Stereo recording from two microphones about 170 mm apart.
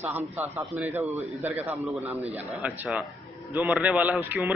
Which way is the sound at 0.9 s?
40° right (ahead or behind).